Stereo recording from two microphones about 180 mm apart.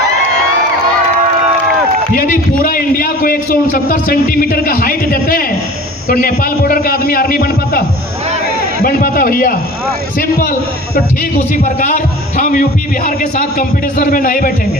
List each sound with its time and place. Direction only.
2.1 s a man's voice: 50° left (ahead or behind)
11.5 s a man's voice: 45° left (ahead or behind)